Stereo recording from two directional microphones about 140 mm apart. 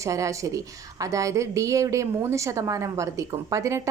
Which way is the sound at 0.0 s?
20° right (ahead or behind).